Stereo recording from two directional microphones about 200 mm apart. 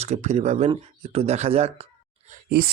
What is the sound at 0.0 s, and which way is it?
Speech, 35° right (ahead or behind).